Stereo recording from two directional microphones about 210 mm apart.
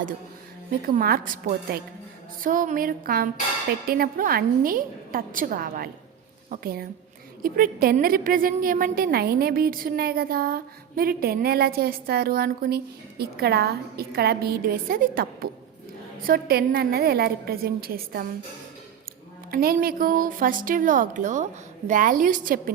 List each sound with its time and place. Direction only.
0.9 s a woman's voice: 45° right (ahead or behind)
19.5 s a woman's voice: 45° right (ahead or behind)